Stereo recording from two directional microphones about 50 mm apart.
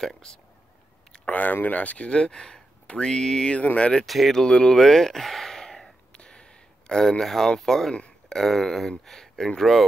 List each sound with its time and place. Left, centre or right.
0.0 s speech: centre
1.1 s speech: left; by 3.5 s centre
3.5 s speech: left
4.0 s speech: centre
4.4 s speech: centre
6.1 s a sound: centre
7.9 s a sound: left
8.4 s speech: centre